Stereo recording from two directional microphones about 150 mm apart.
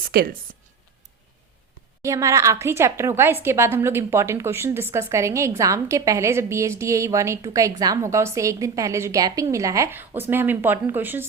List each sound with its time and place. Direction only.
0.1 s speech: 90° right
2.0 s a woman's voice: 20° right (ahead or behind)